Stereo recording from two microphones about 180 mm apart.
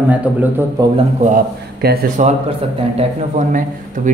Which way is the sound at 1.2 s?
55° right (ahead or behind).